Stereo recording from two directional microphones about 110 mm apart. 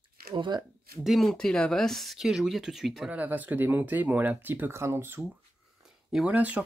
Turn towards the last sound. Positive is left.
turn(degrees=-15)  # may be behind; listen again after turning